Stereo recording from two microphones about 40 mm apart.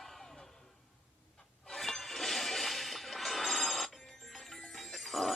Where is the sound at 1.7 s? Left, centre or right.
Centre.